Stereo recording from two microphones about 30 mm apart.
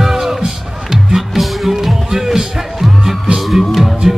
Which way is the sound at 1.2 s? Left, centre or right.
Centre.